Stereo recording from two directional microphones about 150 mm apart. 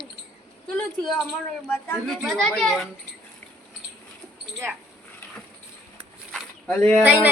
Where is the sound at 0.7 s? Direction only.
5° left (ahead or behind).